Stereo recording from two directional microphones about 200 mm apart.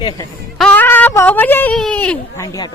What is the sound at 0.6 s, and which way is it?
Speech, 10° left (ahead or behind).